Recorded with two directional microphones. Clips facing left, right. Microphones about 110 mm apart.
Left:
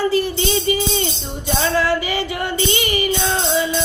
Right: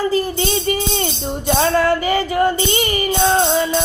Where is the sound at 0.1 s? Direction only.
40° right (ahead or behind).